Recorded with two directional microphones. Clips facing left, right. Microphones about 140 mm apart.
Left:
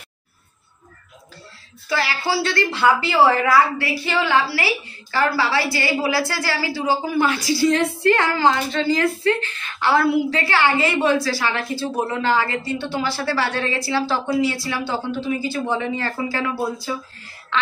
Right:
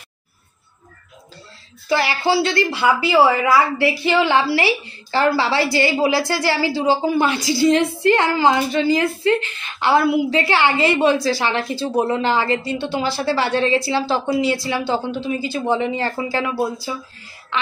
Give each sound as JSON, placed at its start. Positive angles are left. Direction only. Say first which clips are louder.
{"t": 1.9, "sound": "a woman's voice", "louder": "right 4 dB", "side_deg": -20}